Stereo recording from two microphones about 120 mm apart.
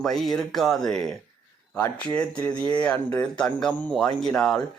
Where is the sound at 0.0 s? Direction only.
Centre (ahead or behind).